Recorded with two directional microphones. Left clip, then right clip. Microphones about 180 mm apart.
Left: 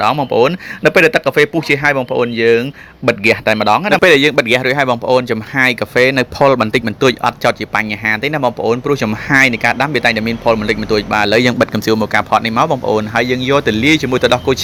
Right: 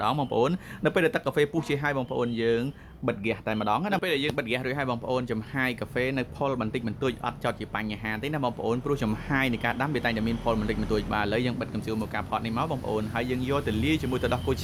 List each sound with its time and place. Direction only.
0.0 s speech: 15° left (ahead or behind)
4.0 s speech: 40° left (ahead or behind)
11.6 s speech: 40° left (ahead or behind); by 14.6 s 20° left (ahead or behind)